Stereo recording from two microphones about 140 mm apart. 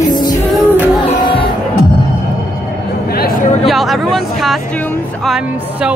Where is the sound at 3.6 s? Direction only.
Centre (ahead or behind).